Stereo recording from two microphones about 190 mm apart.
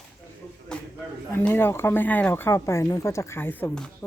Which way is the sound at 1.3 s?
10° left (ahead or behind).